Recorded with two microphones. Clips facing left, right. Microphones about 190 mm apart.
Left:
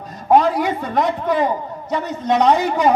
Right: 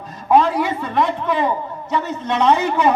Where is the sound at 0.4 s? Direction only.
45° left (ahead or behind).